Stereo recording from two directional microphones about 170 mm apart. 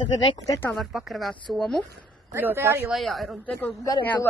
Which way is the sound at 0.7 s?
Centre (ahead or behind).